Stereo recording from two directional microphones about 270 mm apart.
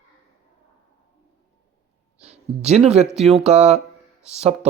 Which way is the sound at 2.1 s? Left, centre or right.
Right.